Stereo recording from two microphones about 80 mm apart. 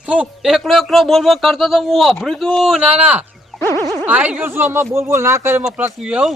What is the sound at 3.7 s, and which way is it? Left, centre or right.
Speech, right.